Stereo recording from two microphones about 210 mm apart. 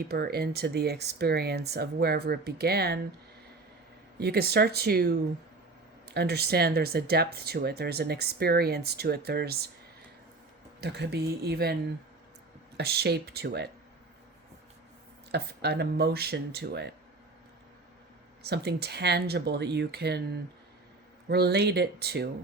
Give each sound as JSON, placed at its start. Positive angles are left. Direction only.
{"t": 0.0, "sound": "speech", "side_deg": -50}
{"t": 4.2, "sound": "speech", "side_deg": -50}
{"t": 10.8, "sound": "speech", "side_deg": -50}
{"t": 15.3, "sound": "speech", "side_deg": -50}
{"t": 18.4, "sound": "speech", "side_deg": -50}